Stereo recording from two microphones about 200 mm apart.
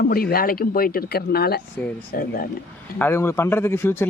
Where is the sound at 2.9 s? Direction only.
10° left (ahead or behind).